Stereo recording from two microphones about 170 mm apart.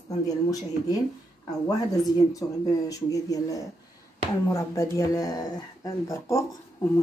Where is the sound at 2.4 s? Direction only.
25° left (ahead or behind).